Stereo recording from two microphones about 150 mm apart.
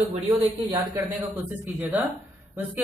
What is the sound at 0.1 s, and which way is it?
Speech, 45° right (ahead or behind).